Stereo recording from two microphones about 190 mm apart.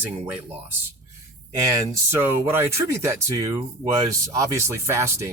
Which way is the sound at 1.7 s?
15° right (ahead or behind).